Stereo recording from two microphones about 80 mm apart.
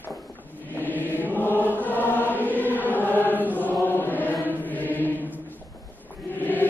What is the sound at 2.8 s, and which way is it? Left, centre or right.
Chant, left.